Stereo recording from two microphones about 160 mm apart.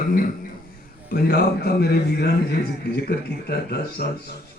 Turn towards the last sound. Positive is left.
turn(degrees=80)